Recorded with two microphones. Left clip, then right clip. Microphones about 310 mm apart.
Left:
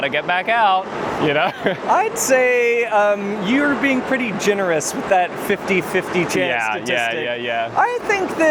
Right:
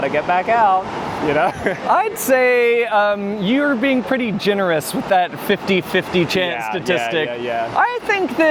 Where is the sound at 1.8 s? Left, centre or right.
Right.